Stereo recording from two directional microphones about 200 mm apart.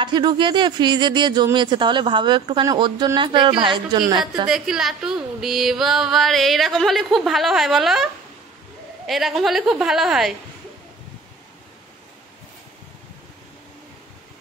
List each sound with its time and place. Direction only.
0.0 s speech: 20° right (ahead or behind)
4.5 s speech: centre (ahead or behind)